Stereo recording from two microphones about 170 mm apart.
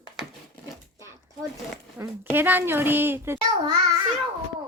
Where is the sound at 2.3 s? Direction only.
10° right (ahead or behind).